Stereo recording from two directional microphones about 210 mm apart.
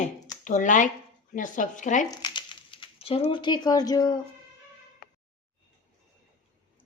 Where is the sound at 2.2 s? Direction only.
20° left (ahead or behind).